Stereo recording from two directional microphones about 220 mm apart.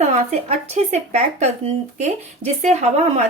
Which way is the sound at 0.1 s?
30° right (ahead or behind).